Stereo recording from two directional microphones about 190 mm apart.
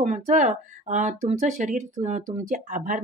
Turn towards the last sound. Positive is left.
turn(degrees=-45)  # may be behind; listen again after turning